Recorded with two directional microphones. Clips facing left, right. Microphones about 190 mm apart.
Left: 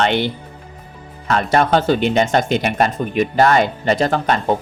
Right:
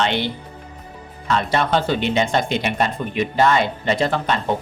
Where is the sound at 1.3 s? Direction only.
50° left (ahead or behind).